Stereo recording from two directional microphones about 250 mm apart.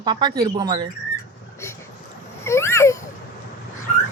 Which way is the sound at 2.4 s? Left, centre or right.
Centre.